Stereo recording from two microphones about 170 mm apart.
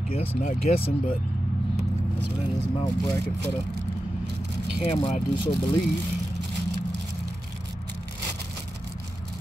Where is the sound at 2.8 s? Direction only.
25° left (ahead or behind).